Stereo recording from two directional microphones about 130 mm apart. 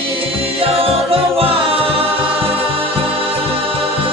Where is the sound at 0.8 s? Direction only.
50° right (ahead or behind).